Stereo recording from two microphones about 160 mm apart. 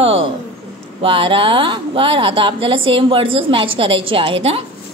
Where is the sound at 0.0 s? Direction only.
35° right (ahead or behind).